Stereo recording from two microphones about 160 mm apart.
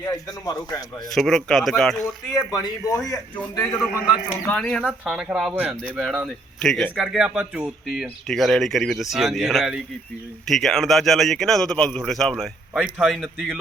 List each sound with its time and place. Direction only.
0.0 s speech: 25° left (ahead or behind)
1.1 s a man's voice: centre (ahead or behind)
2.5 s speech: 20° left (ahead or behind)
3.3 s a man's voice: 10° left (ahead or behind)